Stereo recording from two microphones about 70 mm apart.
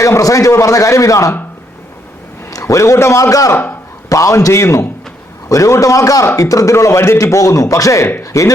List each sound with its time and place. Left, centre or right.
0.0 s a man's voice: left
2.5 s a man's voice: left
3.5 s a man's voice: left
4.1 s a man's voice: left